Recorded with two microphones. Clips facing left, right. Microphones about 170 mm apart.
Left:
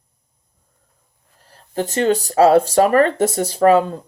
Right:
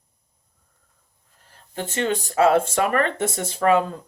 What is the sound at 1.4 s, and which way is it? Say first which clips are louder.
Speech: left 8 dB; 35° left (ahead or behind).